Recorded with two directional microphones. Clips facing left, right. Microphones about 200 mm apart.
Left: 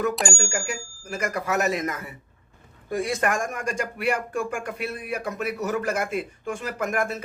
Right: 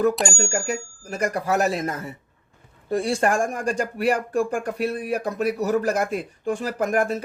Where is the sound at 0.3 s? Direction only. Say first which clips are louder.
Right 4 dB; 35° right (ahead or behind).